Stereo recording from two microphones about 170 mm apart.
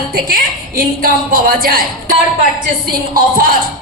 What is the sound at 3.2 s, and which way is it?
Speech, 60° right (ahead or behind).